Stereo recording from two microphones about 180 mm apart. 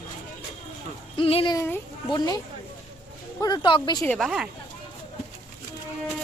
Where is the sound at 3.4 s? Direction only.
25° left (ahead or behind).